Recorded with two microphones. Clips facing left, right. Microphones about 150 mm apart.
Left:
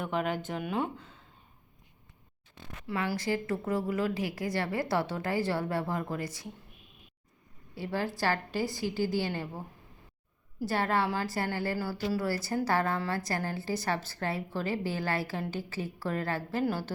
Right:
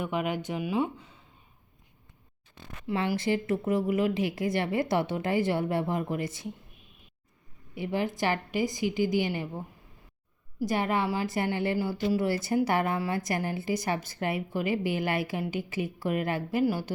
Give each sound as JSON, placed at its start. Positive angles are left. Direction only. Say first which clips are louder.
{"t": 0.0, "sound": "a woman's voice", "louder": "right 1 dB", "side_deg": -10}
{"t": 2.8, "sound": "speech", "louder": "right 4 dB", "side_deg": -25}
{"t": 7.8, "sound": "a woman's voice", "louder": "right 3 dB", "side_deg": -20}
{"t": 10.6, "sound": "a woman's voice", "louder": "right 1 dB", "side_deg": -15}